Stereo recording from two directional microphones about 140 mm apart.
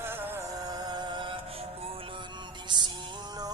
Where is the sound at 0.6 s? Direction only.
30° right (ahead or behind).